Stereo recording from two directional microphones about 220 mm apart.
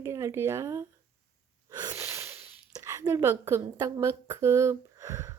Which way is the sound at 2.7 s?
15° right (ahead or behind).